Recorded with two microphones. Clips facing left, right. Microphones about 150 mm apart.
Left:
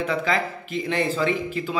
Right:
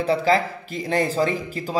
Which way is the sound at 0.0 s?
35° right (ahead or behind).